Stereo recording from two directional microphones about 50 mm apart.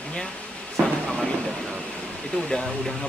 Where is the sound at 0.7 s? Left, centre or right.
Centre.